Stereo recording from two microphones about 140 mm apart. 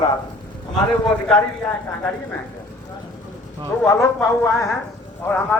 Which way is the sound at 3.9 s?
20° left (ahead or behind).